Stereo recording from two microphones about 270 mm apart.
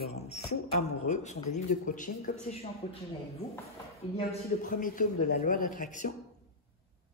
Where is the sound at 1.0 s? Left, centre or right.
Left.